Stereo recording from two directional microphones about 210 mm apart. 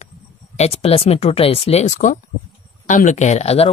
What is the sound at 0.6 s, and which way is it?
Speech, 30° left (ahead or behind).